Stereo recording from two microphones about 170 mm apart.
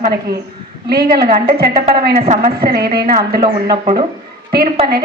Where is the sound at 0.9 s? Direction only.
65° right (ahead or behind).